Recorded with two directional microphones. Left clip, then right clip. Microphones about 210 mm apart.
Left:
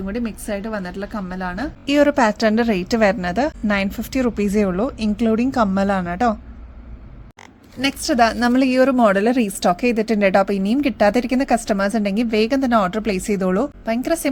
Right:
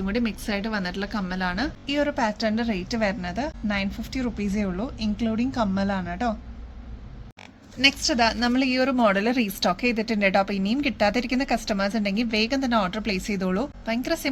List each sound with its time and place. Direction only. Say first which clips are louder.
0.0 s speech: left 1 dB; 15° left (ahead or behind)
1.9 s a woman's voice: left 10 dB; 55° left (ahead or behind)
7.8 s a woman's voice: left 3 dB; 35° left (ahead or behind)